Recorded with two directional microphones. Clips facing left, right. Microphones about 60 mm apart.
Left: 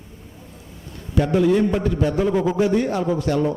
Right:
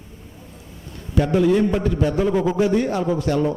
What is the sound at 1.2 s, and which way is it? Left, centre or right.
A man's voice, centre.